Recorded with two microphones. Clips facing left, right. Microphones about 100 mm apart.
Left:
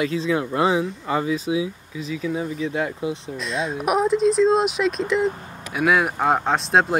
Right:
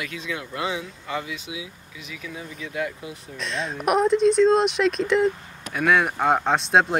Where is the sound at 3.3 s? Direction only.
Centre (ahead or behind).